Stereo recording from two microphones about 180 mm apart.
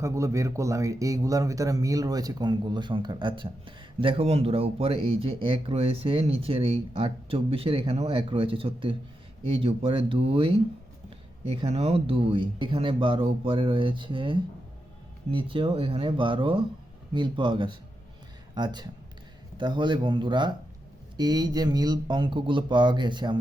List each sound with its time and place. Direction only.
0.0 s a man's voice: 15° right (ahead or behind); by 10.5 s 30° right (ahead or behind)
11.5 s a man's voice: 35° right (ahead or behind)